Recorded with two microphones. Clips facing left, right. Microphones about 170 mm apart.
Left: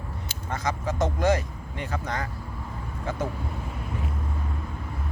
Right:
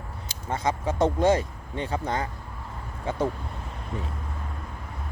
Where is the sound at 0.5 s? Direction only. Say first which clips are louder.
Right 2 dB; 25° right (ahead or behind).